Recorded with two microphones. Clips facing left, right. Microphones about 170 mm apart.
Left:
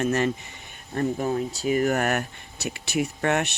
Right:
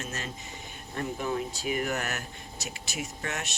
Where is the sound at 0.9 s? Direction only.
40° left (ahead or behind).